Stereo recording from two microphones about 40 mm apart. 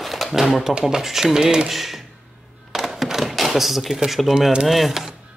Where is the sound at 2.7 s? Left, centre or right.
Centre.